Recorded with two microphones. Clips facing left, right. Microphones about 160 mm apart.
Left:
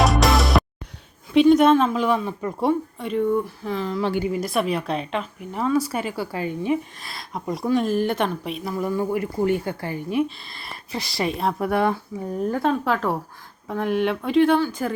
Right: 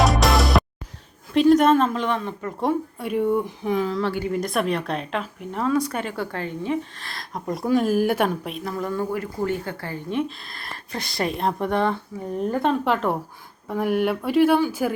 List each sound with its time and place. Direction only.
0.0 s music: centre (ahead or behind)
1.3 s speech: centre (ahead or behind)
3.0 s speech: 10° right (ahead or behind)
4.0 s a woman's voice: 15° left (ahead or behind)
4.3 s speech: 5° left (ahead or behind)